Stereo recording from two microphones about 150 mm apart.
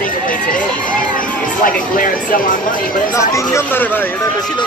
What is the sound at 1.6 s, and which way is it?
Speech, 65° left (ahead or behind).